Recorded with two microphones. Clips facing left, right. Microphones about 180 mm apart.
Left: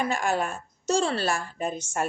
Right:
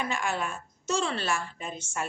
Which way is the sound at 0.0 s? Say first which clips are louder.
Left 5 dB; 40° left (ahead or behind).